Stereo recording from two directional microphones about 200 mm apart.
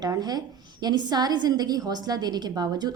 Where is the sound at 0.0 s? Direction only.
20° right (ahead or behind).